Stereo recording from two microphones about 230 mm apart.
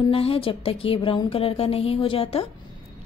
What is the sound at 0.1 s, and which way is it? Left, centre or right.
A woman's voice, left.